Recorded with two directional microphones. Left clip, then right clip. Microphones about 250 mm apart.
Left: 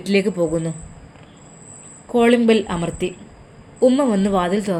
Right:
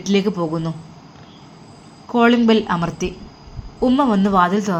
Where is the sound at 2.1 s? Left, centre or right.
Centre.